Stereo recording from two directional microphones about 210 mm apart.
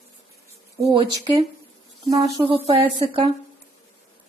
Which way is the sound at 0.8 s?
20° right (ahead or behind).